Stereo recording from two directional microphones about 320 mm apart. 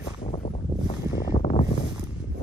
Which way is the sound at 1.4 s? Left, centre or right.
Centre.